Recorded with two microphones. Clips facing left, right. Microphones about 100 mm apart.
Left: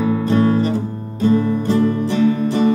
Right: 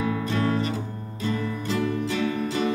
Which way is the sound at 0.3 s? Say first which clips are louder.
Left 12 dB; 35° left (ahead or behind).